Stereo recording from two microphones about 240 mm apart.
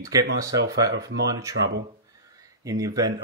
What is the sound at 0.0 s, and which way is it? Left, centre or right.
Speech, centre.